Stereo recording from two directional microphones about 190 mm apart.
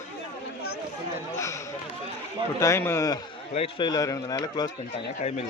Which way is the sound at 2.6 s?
15° left (ahead or behind).